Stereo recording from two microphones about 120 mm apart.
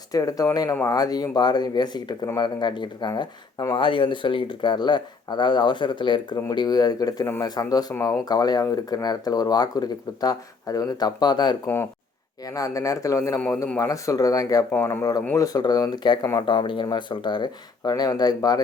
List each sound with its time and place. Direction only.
0.1 s speech: 30° left (ahead or behind)
3.8 s speech: 45° left (ahead or behind)
11.6 s speech: 20° left (ahead or behind)
14.7 s speech: 15° left (ahead or behind)
15.4 s speech: 30° left (ahead or behind)